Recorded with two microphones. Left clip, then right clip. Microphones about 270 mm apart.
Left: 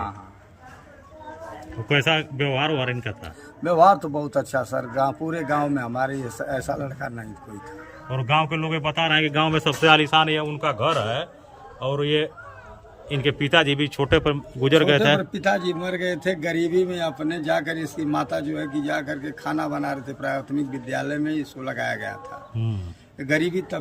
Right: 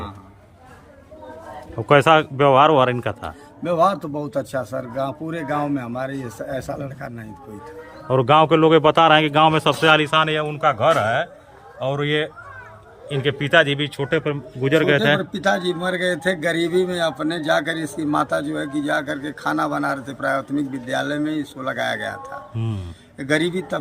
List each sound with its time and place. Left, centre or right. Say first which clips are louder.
1.9 s speech: right 7 dB; centre
3.6 s a man's voice: left 2 dB; centre
8.0 s a man's voice: right 7 dB; right
9.0 s speech: right 6 dB; centre
9.8 s a man's voice: even; centre